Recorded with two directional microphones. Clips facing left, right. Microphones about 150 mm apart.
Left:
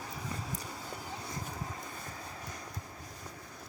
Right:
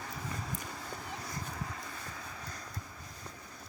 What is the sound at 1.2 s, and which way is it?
Vehicle, 15° left (ahead or behind).